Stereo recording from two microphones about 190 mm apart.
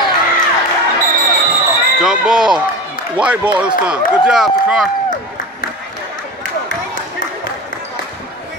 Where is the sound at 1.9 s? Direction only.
5° right (ahead or behind).